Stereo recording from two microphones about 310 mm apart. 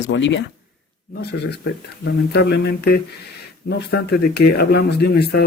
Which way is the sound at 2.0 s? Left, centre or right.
Left.